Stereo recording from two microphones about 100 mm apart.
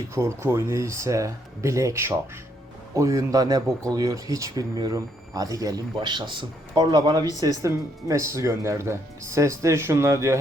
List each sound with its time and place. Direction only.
0.1 s speech: 30° right (ahead or behind)